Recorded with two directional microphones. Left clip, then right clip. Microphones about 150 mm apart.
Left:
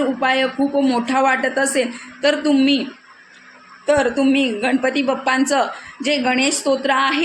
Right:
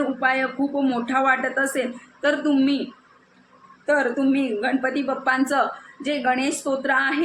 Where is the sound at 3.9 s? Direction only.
45° left (ahead or behind).